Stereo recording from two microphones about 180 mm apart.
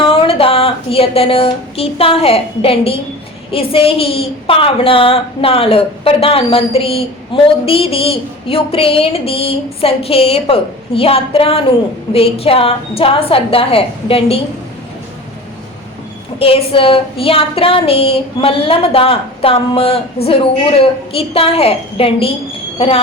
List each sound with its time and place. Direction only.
0.0 s a sound: 30° left (ahead or behind)
3.5 s a woman's voice: 30° left (ahead or behind)
16.4 s a woman's voice: 30° left (ahead or behind)